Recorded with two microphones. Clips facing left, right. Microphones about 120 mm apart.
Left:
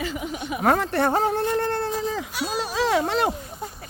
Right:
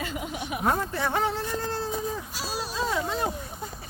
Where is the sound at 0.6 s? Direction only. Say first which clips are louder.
Left 7 dB; 80° left.